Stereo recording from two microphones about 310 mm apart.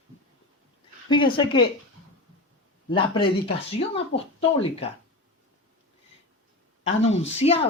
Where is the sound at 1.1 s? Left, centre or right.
Centre.